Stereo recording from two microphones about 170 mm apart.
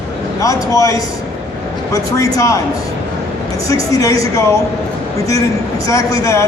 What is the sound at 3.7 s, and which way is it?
Speech, 20° left (ahead or behind).